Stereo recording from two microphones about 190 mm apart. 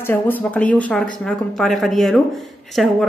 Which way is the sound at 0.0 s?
10° left (ahead or behind).